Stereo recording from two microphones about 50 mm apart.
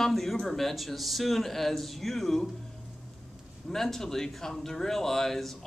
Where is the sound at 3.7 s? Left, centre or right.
Centre.